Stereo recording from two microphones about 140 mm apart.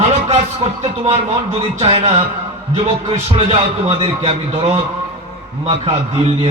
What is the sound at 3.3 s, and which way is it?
Speech, 40° right (ahead or behind).